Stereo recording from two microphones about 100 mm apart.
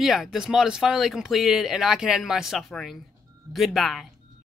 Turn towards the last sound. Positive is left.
turn(degrees=0)  # may be behind; listen again after turning